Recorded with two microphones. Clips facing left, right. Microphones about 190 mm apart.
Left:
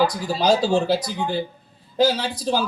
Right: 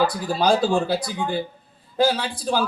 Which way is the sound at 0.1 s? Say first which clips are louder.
Even; 55° right (ahead or behind).